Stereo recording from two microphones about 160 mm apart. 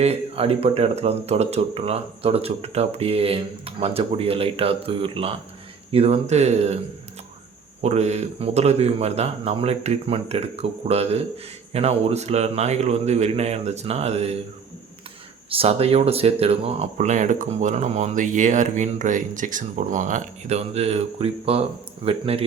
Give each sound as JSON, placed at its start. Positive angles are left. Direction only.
{"t": 0.0, "sound": "speech", "side_deg": -40}
{"t": 7.8, "sound": "speech", "side_deg": -45}
{"t": 15.4, "sound": "speech", "side_deg": -35}